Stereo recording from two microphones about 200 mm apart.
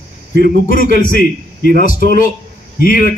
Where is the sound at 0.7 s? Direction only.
45° left (ahead or behind).